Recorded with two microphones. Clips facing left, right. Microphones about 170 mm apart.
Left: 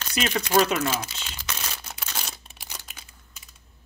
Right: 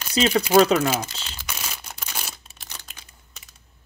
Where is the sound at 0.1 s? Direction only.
30° right (ahead or behind).